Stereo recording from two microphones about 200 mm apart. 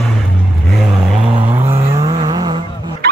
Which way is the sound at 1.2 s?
25° right (ahead or behind).